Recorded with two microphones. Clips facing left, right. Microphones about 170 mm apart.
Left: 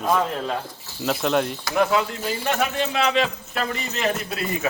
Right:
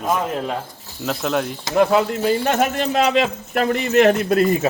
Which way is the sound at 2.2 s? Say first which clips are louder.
Right 6 dB; 50° right (ahead or behind).